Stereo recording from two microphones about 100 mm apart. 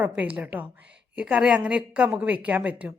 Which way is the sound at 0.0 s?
15° right (ahead or behind).